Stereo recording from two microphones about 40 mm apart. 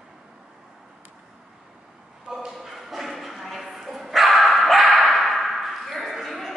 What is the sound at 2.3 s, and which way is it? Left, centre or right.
Bow-wow, centre.